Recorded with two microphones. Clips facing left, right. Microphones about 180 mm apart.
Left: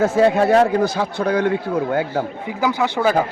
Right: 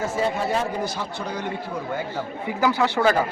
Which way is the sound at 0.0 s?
70° left (ahead or behind).